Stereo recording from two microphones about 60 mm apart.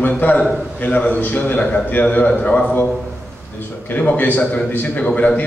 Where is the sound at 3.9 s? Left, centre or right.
Left.